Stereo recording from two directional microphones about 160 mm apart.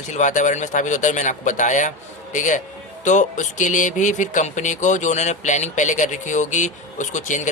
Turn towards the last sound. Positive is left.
turn(degrees=50)  # may be behind; listen again after turning